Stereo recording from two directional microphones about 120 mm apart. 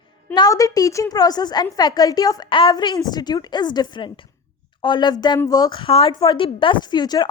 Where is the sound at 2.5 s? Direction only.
45° left (ahead or behind).